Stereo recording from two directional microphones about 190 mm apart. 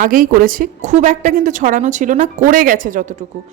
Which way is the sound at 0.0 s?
45° right (ahead or behind).